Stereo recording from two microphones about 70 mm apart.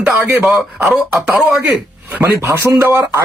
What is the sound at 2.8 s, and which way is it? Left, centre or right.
Speech, right.